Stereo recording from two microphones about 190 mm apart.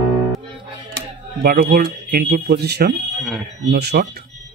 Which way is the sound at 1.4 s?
50° right (ahead or behind).